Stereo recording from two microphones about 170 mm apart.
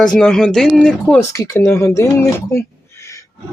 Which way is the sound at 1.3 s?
20° left (ahead or behind).